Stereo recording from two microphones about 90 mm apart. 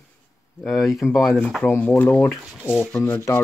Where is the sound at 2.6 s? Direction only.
25° left (ahead or behind).